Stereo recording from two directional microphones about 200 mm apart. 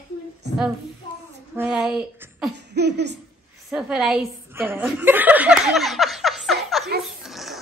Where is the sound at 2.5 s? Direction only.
55° right (ahead or behind).